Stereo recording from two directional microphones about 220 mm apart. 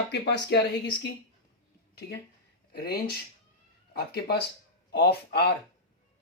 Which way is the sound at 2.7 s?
45° left (ahead or behind).